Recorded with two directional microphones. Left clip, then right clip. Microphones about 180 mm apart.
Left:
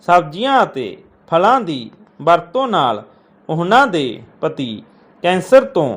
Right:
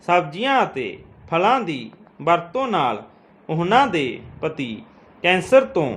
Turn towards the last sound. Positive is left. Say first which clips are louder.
# left 5 dB
turn(degrees=15)  # may be behind; listen again after turning